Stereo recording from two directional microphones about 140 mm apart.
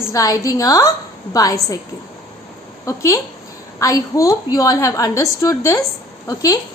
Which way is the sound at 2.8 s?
20° left (ahead or behind).